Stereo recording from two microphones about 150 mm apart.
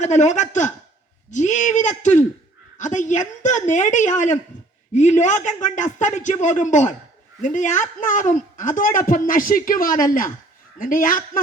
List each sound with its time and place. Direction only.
0.0 s speech: 50° left (ahead or behind)